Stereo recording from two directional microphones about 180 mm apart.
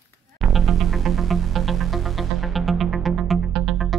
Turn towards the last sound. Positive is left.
turn(degrees=0)  # may be behind; listen again after turning